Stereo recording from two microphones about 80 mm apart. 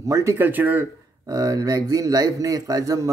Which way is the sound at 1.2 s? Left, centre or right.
Right.